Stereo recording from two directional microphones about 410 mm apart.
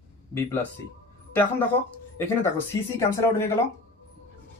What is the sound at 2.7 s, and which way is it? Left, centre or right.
Speech, centre.